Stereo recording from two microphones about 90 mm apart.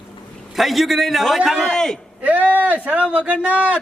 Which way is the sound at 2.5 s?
20° right (ahead or behind).